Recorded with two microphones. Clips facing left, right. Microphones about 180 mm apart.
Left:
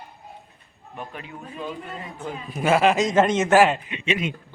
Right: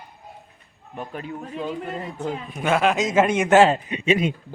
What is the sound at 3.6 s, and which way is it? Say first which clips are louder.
Speech: right 2 dB; 35° right (ahead or behind).